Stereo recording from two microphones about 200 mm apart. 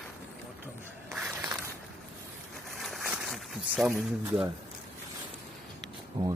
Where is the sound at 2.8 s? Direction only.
Centre (ahead or behind).